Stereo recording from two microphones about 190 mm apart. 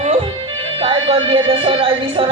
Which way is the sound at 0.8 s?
30° right (ahead or behind).